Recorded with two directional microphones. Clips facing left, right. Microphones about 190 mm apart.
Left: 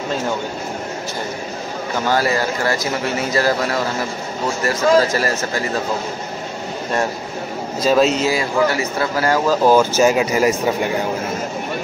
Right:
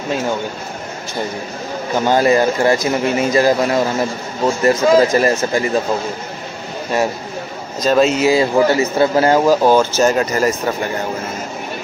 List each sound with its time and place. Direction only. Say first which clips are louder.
2.0 s speech: right 6 dB; 20° right (ahead or behind)
7.8 s speech: right 1 dB; centre (ahead or behind)
8.3 s speech: right 5 dB; 25° right (ahead or behind)
9.7 s speech: even; 5° left (ahead or behind)